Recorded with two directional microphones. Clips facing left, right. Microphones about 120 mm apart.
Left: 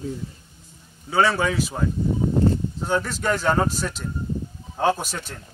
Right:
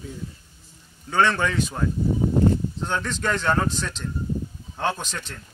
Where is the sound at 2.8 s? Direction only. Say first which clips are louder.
Left 7 dB; 10° left (ahead or behind).